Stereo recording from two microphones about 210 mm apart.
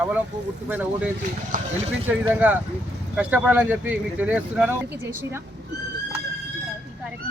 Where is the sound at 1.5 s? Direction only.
40° right (ahead or behind).